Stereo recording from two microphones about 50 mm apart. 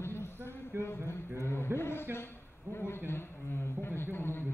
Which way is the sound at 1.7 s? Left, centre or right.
Left.